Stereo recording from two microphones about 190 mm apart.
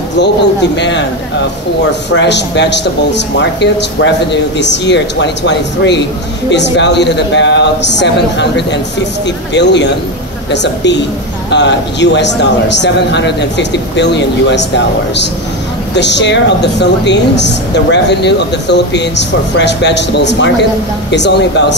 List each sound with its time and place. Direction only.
0.7 s speech: 65° left (ahead or behind)
2.0 s speech: 65° left (ahead or behind)
15.9 s speech: 65° left (ahead or behind)